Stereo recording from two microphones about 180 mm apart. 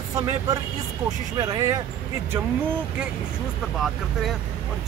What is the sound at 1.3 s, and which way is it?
Speech, 20° right (ahead or behind).